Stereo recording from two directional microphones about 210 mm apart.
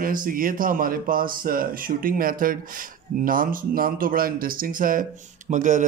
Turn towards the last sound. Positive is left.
turn(degrees=-35)  # may be behind; listen again after turning